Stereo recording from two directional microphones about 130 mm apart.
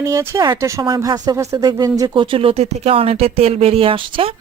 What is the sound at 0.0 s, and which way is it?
Speech, 20° right (ahead or behind).